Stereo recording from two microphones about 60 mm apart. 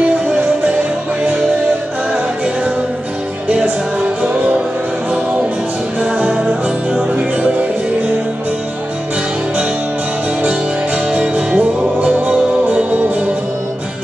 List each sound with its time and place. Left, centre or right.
0.0 s music: centre
2.1 s music: centre
4.2 s music: centre
5.9 s music: centre
11.1 s music: right